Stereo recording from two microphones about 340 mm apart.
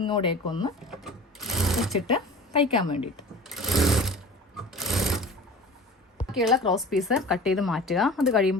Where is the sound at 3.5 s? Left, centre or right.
Centre.